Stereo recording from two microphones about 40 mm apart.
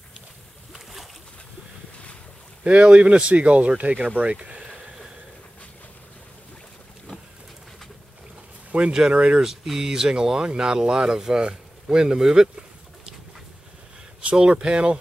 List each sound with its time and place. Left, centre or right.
2.6 s speech: right
8.7 s speech: right
9.4 s speech: centre
14.2 s speech: right